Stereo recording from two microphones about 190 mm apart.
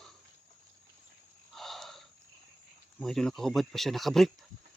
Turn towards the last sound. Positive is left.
turn(degrees=0)  # may be behind; listen again after turning